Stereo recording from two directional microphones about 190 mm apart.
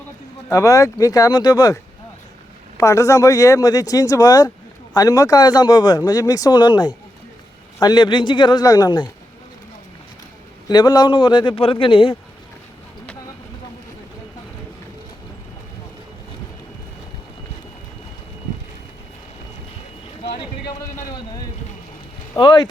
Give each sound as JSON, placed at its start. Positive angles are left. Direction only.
{"t": 0.5, "sound": "a man's voice", "side_deg": 15}
{"t": 10.7, "sound": "a man's voice", "side_deg": 20}
{"t": 20.7, "sound": "a sound", "side_deg": 20}
{"t": 22.4, "sound": "a man's voice", "side_deg": 25}